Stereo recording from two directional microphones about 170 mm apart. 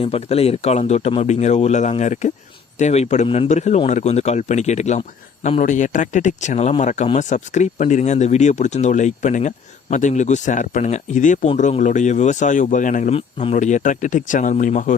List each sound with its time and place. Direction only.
0.0 s a man's voice: 35° left (ahead or behind)
13.1 s a man's voice: 40° left (ahead or behind)